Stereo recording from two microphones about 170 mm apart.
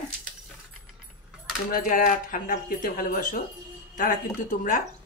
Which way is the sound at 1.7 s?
50° left (ahead or behind).